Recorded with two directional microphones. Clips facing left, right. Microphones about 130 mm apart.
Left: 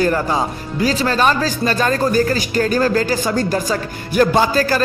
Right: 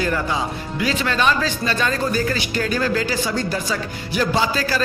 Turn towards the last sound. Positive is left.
turn(degrees=45)  # may be behind; listen again after turning